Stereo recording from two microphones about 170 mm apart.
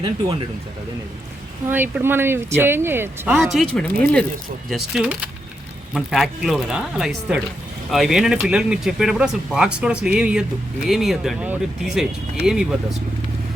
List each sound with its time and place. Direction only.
1.6 s speech: 10° right (ahead or behind)
3.5 s speech: 5° left (ahead or behind)